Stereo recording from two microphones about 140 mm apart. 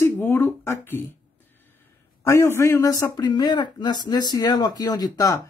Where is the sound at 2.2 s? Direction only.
20° left (ahead or behind).